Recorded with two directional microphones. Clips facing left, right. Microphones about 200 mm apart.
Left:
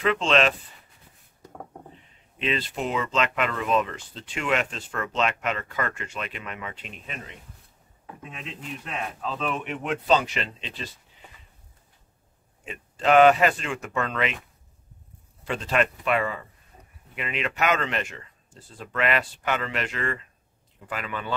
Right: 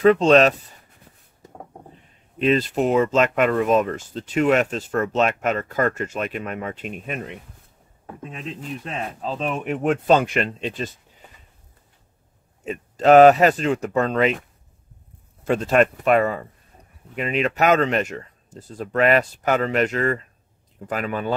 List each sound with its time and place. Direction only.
0.0 s speech: 40° right (ahead or behind)
2.3 s speech: 45° right (ahead or behind)
8.2 s speech: 40° right (ahead or behind)
12.6 s speech: 40° right (ahead or behind)
15.4 s speech: 45° right (ahead or behind)